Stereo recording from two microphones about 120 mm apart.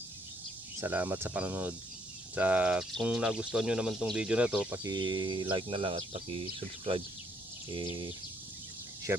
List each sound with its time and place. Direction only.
0.8 s speech: 15° right (ahead or behind)
4.8 s speech: 35° right (ahead or behind)
9.1 s speech: 20° right (ahead or behind)